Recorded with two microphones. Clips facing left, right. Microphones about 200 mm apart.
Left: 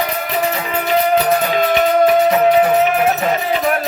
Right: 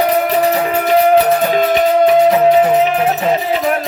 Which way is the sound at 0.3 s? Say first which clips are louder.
Right 6 dB; 35° right (ahead or behind).